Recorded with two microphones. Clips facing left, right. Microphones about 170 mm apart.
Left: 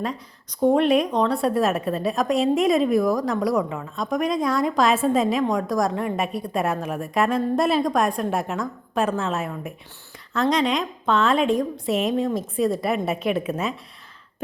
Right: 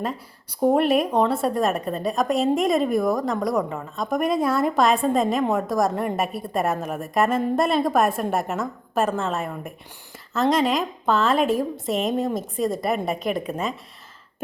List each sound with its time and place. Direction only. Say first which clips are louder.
0.6 s a woman's voice: left 1 dB; 5° right (ahead or behind)